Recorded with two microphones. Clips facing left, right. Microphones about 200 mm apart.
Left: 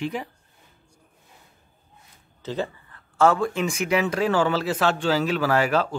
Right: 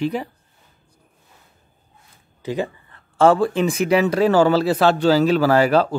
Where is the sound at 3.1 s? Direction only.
30° right (ahead or behind).